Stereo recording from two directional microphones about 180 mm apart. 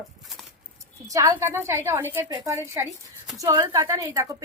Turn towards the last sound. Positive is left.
turn(degrees=-20)  # may be behind; listen again after turning